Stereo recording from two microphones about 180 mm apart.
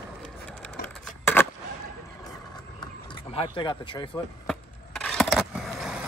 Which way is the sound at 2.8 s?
30° left (ahead or behind).